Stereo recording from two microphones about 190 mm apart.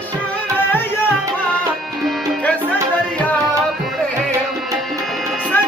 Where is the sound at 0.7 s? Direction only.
10° left (ahead or behind).